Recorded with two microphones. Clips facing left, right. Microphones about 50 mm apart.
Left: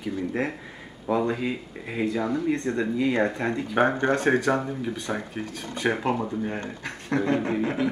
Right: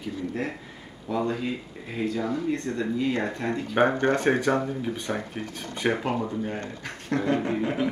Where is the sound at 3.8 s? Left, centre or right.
Right.